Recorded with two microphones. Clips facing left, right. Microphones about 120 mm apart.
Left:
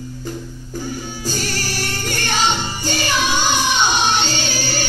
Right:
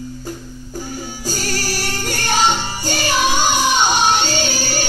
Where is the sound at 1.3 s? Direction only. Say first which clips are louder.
Right 2 dB; 45° right (ahead or behind).